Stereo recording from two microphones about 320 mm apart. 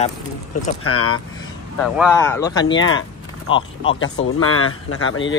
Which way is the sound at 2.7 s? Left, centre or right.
Left.